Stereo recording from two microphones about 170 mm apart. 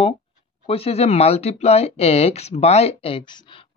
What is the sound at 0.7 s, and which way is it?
Speech, 35° left (ahead or behind).